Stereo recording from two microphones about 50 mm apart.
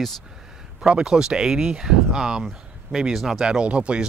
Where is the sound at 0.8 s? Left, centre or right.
Centre.